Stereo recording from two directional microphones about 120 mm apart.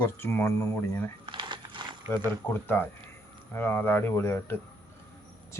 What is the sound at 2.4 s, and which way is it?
Speech, 15° left (ahead or behind).